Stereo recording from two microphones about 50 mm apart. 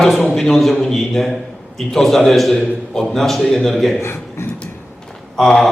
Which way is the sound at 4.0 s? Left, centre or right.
Left.